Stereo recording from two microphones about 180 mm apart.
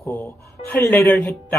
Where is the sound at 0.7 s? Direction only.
10° left (ahead or behind).